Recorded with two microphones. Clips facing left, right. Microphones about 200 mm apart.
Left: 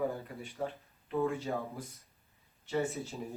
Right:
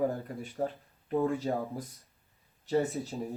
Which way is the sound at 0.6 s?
40° right (ahead or behind).